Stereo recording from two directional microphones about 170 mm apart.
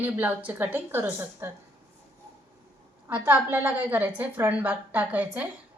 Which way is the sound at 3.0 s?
10° right (ahead or behind).